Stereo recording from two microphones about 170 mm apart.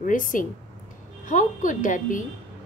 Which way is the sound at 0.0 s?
50° left (ahead or behind).